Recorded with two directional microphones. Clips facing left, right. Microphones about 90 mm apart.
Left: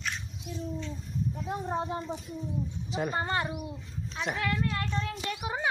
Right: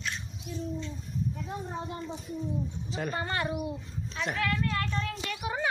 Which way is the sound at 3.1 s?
20° left (ahead or behind).